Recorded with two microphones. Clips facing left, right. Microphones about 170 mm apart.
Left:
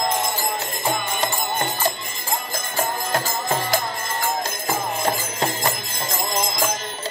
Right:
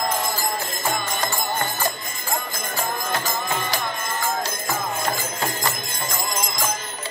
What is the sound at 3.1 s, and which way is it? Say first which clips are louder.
Music: left 2 dB; 45° left (ahead or behind).